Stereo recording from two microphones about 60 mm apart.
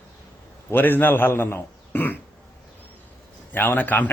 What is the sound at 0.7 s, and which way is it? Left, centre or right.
Speech, left.